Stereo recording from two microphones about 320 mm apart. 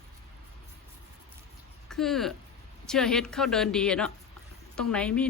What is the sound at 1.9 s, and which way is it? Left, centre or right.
A woman's voice, centre.